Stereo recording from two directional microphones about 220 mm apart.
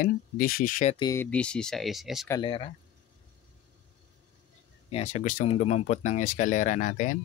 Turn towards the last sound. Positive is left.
turn(degrees=35)  # may be behind; listen again after turning